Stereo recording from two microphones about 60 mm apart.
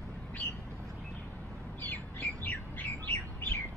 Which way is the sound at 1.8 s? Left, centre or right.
Left.